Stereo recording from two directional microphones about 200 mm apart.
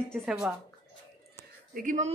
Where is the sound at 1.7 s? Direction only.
40° right (ahead or behind).